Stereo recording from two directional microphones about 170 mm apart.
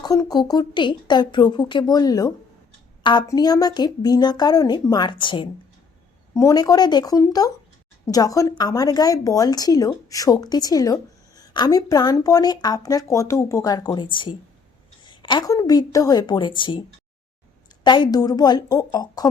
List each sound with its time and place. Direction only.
0.0 s speech: 20° left (ahead or behind)
17.8 s speech: 25° left (ahead or behind)